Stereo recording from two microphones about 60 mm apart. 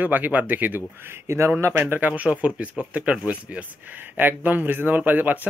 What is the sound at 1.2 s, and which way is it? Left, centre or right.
Speech, right.